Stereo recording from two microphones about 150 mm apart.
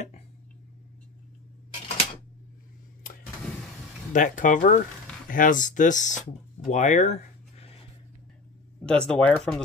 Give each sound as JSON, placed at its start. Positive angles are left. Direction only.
{"t": 4.1, "sound": "speech", "side_deg": 60}
{"t": 8.8, "sound": "speech", "side_deg": 5}